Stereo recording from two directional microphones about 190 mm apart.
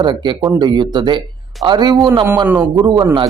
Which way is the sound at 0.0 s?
25° right (ahead or behind).